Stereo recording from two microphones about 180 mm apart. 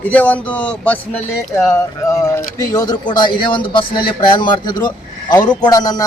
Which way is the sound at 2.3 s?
20° left (ahead or behind).